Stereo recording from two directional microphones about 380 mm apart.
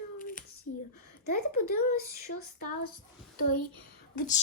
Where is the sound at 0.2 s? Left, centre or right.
Left.